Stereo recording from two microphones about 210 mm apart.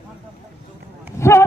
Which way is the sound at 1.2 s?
15° left (ahead or behind).